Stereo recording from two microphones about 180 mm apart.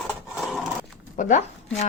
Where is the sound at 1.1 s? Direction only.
45° left (ahead or behind).